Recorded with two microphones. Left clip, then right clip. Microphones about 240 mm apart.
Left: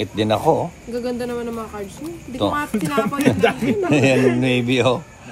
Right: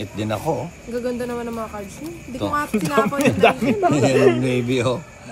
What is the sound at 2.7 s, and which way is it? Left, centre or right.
Speech, centre.